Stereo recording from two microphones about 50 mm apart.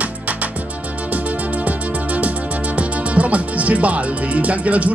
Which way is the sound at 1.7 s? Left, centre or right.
Right.